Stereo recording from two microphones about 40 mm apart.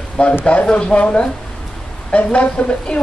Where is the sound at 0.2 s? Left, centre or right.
Left.